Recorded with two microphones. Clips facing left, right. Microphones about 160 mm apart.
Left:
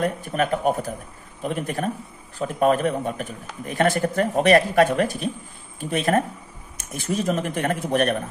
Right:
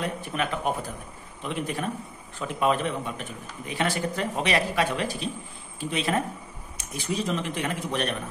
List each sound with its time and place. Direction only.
0.0 s a man's voice: 45° left (ahead or behind)